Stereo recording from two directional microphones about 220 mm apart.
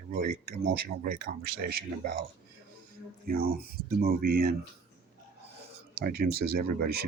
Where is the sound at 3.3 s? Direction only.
40° right (ahead or behind).